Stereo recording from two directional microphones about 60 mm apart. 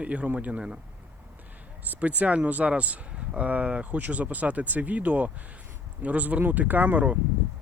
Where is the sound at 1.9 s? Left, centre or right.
Right.